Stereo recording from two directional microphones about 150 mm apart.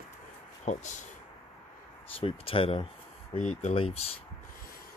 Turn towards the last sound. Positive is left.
turn(degrees=40)  # may be behind; listen again after turning